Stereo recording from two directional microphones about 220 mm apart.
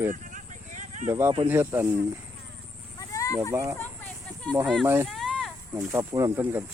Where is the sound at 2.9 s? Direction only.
15° left (ahead or behind).